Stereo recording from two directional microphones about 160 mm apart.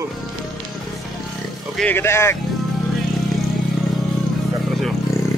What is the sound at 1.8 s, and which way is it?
Speech, 15° left (ahead or behind).